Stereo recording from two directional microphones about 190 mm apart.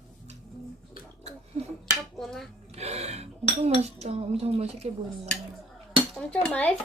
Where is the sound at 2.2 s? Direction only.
Centre (ahead or behind).